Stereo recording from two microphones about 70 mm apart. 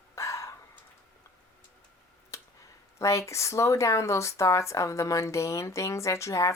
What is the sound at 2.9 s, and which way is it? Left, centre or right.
Speech, left.